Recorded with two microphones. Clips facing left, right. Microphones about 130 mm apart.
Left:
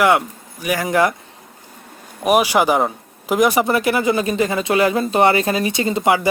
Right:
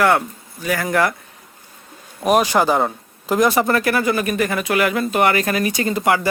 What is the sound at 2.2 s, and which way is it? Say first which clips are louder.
Speech: left 1 dB; 10° left (ahead or behind).